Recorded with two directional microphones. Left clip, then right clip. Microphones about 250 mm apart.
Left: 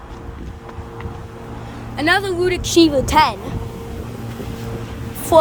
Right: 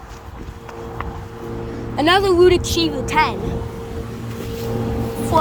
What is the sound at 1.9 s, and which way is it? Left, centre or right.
Speech, centre.